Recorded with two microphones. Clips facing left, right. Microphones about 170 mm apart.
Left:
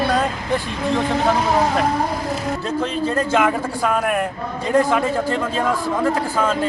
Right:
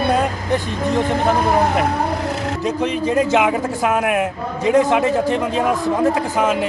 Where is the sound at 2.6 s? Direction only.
15° right (ahead or behind).